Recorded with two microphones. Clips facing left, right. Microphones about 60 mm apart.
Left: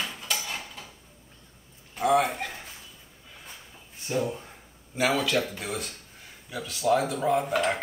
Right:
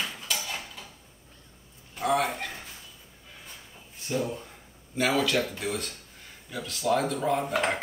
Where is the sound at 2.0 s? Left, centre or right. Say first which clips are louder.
Left 3 dB; centre.